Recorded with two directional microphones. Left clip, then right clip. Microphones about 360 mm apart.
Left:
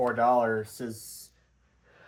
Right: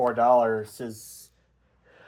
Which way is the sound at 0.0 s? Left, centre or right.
Centre.